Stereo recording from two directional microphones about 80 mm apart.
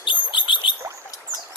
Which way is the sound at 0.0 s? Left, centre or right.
Left.